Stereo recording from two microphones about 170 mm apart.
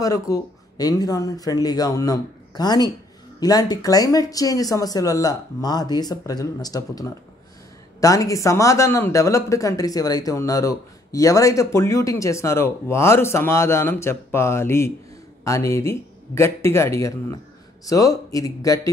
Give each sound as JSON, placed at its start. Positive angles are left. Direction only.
{"t": 0.0, "sound": "speech", "side_deg": 20}